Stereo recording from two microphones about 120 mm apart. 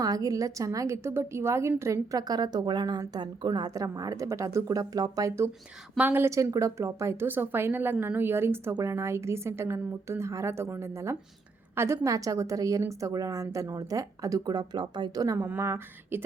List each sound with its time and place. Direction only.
0.0 s a woman's voice: 30° right (ahead or behind)
6.0 s a woman's voice: 15° right (ahead or behind)